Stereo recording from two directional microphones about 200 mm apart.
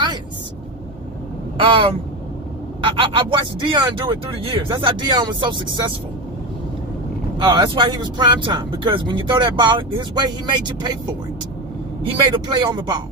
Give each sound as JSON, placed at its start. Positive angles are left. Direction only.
{"t": 1.6, "sound": "speech", "side_deg": -25}
{"t": 7.4, "sound": "speech", "side_deg": -25}
{"t": 12.0, "sound": "speech", "side_deg": -20}